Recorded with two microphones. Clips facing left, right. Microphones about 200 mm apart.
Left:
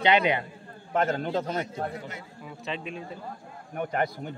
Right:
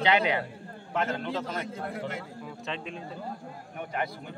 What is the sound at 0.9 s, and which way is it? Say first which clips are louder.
Speech: left 4 dB; 45° left (ahead or behind).